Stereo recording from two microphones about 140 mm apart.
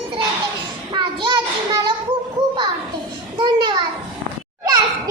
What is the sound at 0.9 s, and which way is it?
Child singing, 35° right (ahead or behind).